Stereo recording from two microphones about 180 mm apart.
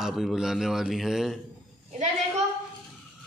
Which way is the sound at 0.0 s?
Centre (ahead or behind).